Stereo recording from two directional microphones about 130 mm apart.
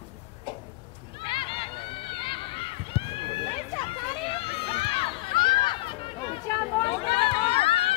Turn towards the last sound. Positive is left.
turn(degrees=45)  # may be behind; listen again after turning